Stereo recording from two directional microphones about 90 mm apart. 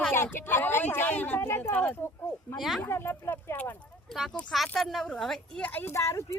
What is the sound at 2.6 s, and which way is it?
Speech, centre (ahead or behind).